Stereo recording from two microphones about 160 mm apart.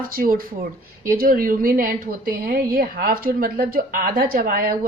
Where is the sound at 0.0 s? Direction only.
65° right (ahead or behind).